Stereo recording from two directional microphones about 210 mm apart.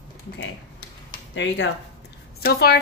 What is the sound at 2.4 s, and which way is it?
Speech, 50° left (ahead or behind).